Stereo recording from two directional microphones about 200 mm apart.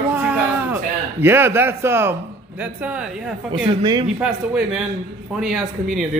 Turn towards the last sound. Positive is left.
turn(degrees=0)  # may be behind; listen again after turning